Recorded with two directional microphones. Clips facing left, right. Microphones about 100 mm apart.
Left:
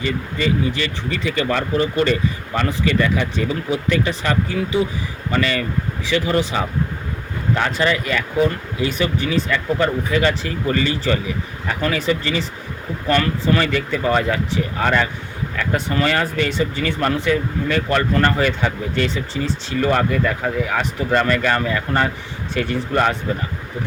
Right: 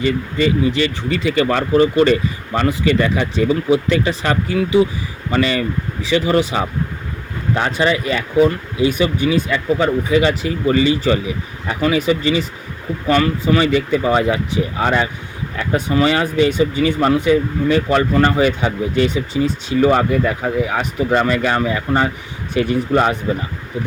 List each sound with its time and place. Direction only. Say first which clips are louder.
0.0 s speech: right 5 dB; 25° right (ahead or behind)
2.6 s speech: right 3 dB; 25° right (ahead or behind)